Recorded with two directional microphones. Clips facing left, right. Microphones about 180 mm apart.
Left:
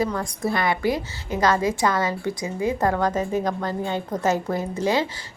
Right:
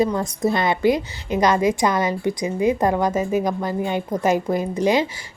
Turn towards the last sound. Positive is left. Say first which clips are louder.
# right 4 dB
turn(degrees=-15)  # may be behind; listen again after turning